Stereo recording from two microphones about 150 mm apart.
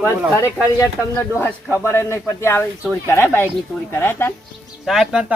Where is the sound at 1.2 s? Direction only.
15° left (ahead or behind).